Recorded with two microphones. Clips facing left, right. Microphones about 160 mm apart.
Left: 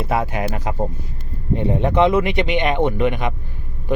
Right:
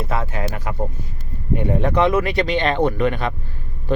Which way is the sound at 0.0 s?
15° left (ahead or behind).